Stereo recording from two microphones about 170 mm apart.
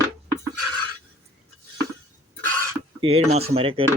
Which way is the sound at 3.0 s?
35° right (ahead or behind).